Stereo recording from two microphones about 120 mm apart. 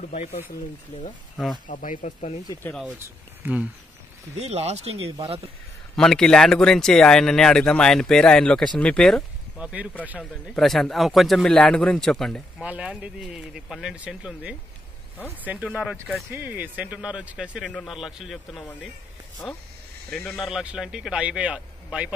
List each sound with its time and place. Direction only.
0.1 s speech: 65° left (ahead or behind)
1.7 s speech: 90° left
3.0 s speech: 15° right (ahead or behind)
4.4 s speech: 65° right (ahead or behind)
5.9 s speech: 5° left (ahead or behind)
9.6 s speech: 10° right (ahead or behind)
10.4 s speech: centre (ahead or behind)
12.6 s a man's voice: 10° right (ahead or behind)
16.3 s a man's voice: 15° right (ahead or behind)
17.6 s a man's voice: 5° left (ahead or behind); by 22.1 s 10° right (ahead or behind)